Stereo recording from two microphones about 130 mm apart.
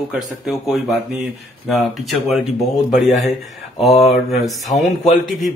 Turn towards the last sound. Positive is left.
turn(degrees=0)  # may be behind; listen again after turning